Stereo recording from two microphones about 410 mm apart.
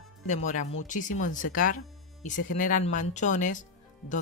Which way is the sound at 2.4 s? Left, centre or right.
Centre.